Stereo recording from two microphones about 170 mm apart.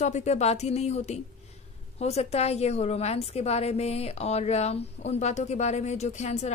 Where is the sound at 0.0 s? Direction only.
40° left (ahead or behind).